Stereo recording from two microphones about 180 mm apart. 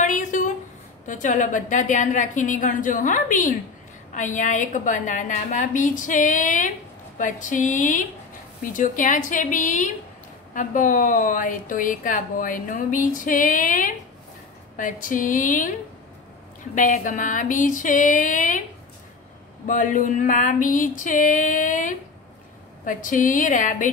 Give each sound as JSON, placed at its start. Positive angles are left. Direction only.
{"t": 0.0, "sound": "a sound", "side_deg": 45}
{"t": 1.0, "sound": "a woman's voice", "side_deg": 45}
{"t": 16.7, "sound": "a woman's voice", "side_deg": 45}
{"t": 19.7, "sound": "a woman's voice", "side_deg": 45}